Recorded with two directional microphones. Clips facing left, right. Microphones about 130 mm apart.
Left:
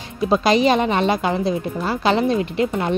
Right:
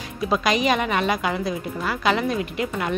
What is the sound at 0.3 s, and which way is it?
A woman's voice, 30° left (ahead or behind).